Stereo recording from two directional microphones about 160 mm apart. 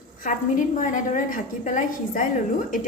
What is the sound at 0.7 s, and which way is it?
A woman's voice, 55° left (ahead or behind).